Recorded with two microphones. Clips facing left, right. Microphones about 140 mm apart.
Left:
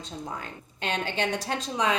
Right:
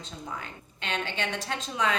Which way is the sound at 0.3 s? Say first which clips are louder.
Left 2 dB; 40° left (ahead or behind).